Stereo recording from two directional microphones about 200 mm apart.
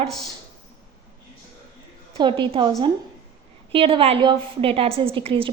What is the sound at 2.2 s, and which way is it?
Speech, 25° right (ahead or behind).